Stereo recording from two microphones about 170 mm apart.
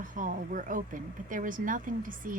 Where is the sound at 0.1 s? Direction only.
50° right (ahead or behind).